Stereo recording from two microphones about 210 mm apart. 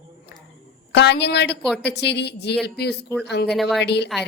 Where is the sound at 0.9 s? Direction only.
55° left (ahead or behind).